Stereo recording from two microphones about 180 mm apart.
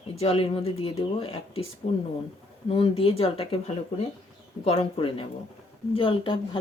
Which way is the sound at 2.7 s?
35° left (ahead or behind).